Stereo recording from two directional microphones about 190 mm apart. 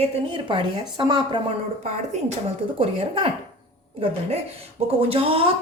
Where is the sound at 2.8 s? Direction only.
30° right (ahead or behind).